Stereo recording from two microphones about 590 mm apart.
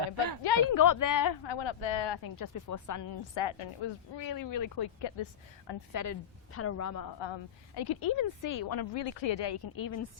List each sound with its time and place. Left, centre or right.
0.0 s a sound: right
0.7 s a woman's voice: left
4.2 s a woman's voice: left